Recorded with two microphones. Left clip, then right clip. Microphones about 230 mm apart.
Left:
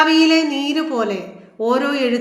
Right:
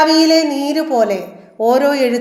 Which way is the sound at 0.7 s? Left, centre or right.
Centre.